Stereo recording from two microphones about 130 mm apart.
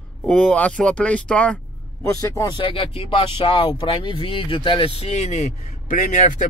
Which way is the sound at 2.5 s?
45° left (ahead or behind).